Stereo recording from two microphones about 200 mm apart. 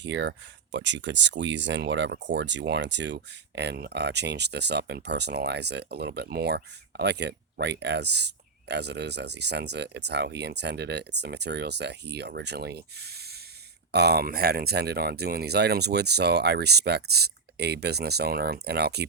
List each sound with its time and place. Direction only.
0.0 s speech: 60° right (ahead or behind)